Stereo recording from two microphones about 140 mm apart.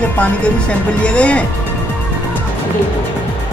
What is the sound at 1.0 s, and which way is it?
Speech, 10° left (ahead or behind).